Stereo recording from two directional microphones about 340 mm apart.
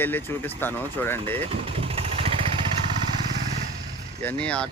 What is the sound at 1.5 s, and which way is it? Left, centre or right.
Vehicle, centre.